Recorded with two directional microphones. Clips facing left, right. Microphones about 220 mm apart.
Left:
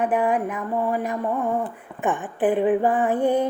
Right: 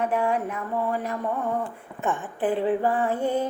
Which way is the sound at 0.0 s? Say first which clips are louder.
Left 3 dB; 15° left (ahead or behind).